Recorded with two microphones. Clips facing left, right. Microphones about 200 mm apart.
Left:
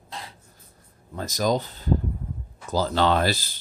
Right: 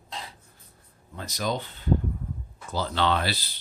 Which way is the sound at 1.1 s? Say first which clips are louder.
Left 6 dB; 40° left (ahead or behind).